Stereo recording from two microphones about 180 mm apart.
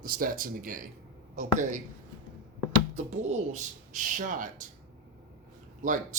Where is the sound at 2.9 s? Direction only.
40° right (ahead or behind).